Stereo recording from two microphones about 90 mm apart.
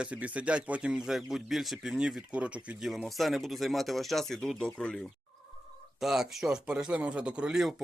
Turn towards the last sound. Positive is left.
turn(degrees=-5)  # may be behind; listen again after turning